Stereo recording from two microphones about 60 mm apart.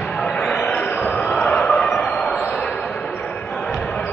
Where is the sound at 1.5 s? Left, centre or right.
Centre.